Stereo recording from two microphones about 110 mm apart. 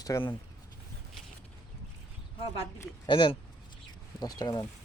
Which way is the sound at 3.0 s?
45° left (ahead or behind).